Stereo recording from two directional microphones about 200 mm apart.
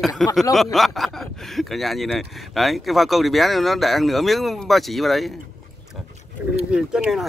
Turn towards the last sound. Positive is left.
turn(degrees=-5)  # may be behind; listen again after turning